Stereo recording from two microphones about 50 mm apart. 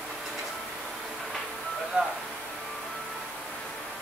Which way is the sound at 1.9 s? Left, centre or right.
Centre.